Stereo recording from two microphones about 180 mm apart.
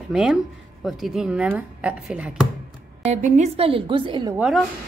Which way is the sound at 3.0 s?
40° right (ahead or behind).